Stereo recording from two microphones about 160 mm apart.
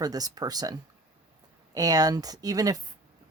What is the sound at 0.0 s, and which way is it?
Speech, 25° right (ahead or behind).